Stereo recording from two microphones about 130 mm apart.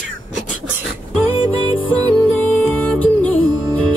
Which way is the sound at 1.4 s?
40° left (ahead or behind).